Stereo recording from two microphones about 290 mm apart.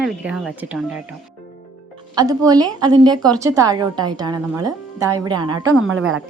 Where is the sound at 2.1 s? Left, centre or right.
Centre.